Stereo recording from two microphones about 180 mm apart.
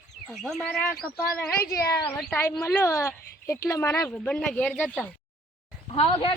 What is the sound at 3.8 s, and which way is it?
Speech, 5° left (ahead or behind).